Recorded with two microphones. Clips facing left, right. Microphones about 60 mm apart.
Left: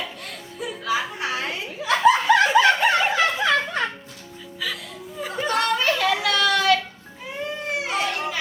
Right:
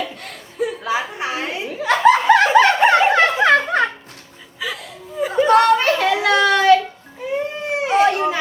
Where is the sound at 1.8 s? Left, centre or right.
Right.